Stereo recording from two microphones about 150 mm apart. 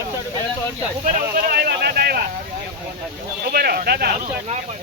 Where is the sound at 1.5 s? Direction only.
90° right.